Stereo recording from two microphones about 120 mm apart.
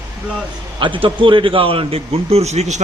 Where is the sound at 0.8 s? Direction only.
45° right (ahead or behind); by 2.8 s 65° right (ahead or behind).